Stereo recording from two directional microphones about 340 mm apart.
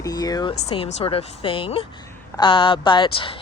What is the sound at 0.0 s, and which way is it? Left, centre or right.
Speech, centre.